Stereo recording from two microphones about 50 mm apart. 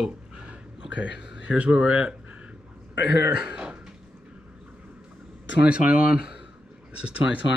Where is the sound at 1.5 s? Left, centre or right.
Right.